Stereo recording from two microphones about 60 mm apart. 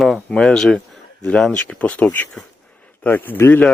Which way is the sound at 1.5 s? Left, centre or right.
Left.